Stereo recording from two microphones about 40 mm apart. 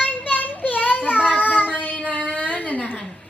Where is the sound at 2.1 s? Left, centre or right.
Left.